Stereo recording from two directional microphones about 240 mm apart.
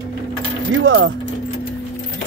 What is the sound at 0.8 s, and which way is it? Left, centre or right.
Speech, right.